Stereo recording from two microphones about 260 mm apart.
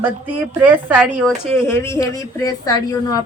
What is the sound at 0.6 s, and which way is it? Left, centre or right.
Speech, centre.